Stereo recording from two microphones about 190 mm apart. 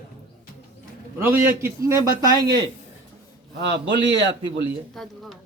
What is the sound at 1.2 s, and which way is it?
A man's voice, 10° right (ahead or behind).